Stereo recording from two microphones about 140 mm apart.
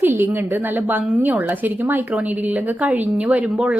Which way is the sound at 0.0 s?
15° right (ahead or behind).